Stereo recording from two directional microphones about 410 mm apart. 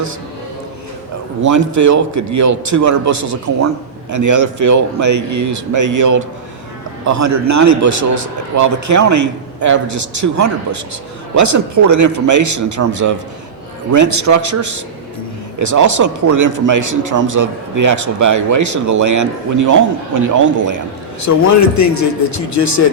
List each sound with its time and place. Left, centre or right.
1.5 s a man's voice: right
21.2 s a man's voice: left